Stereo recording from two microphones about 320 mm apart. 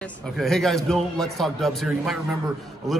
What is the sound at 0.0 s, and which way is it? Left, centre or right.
A man's voice, centre.